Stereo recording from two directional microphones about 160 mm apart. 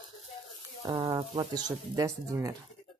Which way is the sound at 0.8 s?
35° right (ahead or behind).